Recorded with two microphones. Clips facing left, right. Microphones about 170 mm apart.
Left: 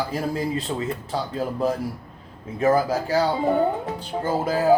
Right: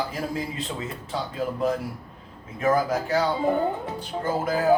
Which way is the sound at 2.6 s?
30° left (ahead or behind).